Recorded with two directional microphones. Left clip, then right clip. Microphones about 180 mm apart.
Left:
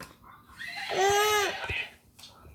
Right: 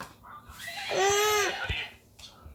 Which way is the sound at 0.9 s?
5° left (ahead or behind).